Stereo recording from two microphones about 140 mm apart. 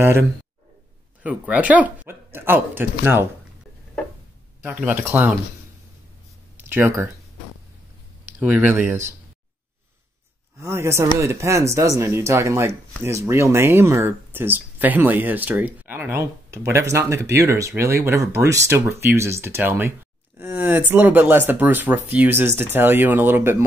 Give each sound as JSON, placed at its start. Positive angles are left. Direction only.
{"t": 1.2, "sound": "speech", "side_deg": -10}
{"t": 4.8, "sound": "speech", "side_deg": -15}
{"t": 6.7, "sound": "speech", "side_deg": -15}
{"t": 8.4, "sound": "speech", "side_deg": -10}
{"t": 10.6, "sound": "speech", "side_deg": -20}